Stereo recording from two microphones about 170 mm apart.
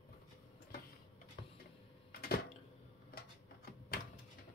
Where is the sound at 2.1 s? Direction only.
65° left (ahead or behind).